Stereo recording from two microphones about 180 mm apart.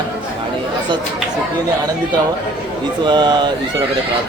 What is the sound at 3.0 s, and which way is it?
Speech, 25° right (ahead or behind).